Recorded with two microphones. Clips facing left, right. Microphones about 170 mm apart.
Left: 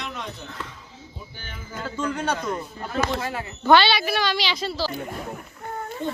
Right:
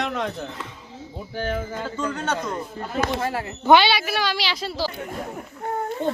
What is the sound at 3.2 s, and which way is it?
Speech, 45° right (ahead or behind).